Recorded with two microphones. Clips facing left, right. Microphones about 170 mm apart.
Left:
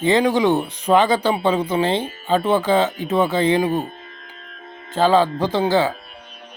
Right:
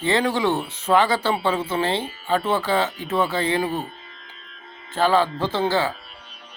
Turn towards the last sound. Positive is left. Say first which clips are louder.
# left 4 dB
turn(degrees=15)  # may be behind; listen again after turning